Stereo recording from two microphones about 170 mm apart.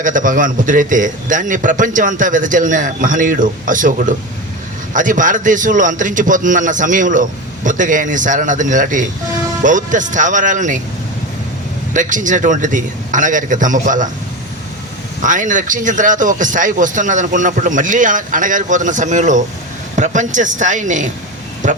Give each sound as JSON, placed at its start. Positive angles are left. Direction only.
{"t": 0.0, "sound": "a man's voice", "side_deg": -50}
{"t": 11.9, "sound": "a man's voice", "side_deg": -50}
{"t": 15.2, "sound": "a man's voice", "side_deg": -50}